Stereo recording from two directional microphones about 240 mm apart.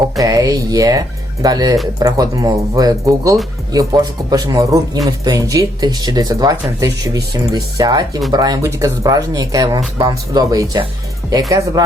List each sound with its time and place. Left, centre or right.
0.2 s speech: centre